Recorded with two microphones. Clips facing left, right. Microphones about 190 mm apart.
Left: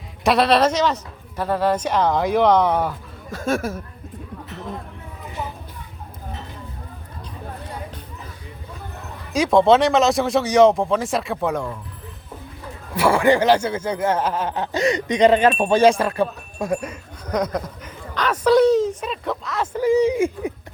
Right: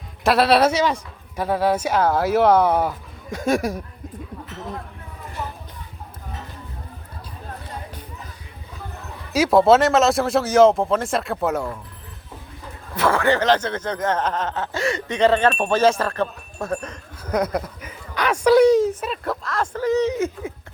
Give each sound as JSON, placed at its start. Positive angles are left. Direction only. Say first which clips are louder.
{"t": 0.3, "sound": "speech", "louder": "even", "side_deg": -5}
{"t": 9.3, "sound": "speech", "louder": "even", "side_deg": -5}
{"t": 13.0, "sound": "speech", "louder": "left 3 dB", "side_deg": 15}
{"t": 17.3, "sound": "speech", "louder": "right 1 dB", "side_deg": -10}